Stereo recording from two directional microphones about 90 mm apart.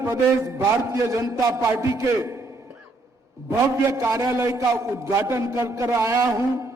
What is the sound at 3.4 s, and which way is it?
A man's voice, 35° right (ahead or behind).